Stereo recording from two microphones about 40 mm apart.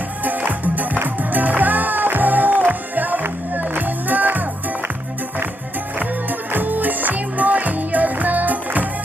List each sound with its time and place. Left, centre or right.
0.3 s music: right
6.5 s music: right